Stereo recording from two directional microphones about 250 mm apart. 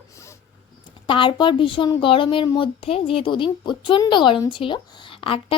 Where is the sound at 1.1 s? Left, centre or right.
Centre.